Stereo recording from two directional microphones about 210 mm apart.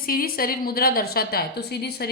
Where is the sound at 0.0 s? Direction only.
45° left (ahead or behind).